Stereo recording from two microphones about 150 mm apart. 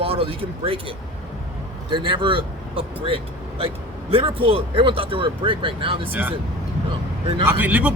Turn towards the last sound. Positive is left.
turn(degrees=-10)  # may be behind; listen again after turning